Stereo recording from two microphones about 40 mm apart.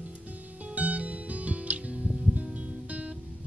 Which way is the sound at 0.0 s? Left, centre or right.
Right.